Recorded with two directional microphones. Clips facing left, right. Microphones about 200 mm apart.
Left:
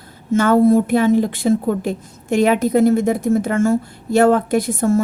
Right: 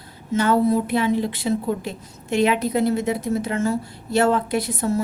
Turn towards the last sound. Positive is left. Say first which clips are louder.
# left 6 dB
turn(degrees=50)  # may be behind; listen again after turning